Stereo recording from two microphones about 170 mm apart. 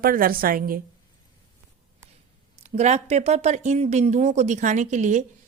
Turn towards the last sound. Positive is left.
turn(degrees=-45)  # may be behind; listen again after turning